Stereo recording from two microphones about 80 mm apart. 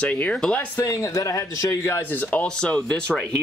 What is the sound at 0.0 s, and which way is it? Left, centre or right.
Speech, centre.